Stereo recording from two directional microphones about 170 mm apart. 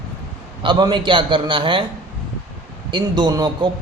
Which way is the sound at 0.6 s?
25° right (ahead or behind).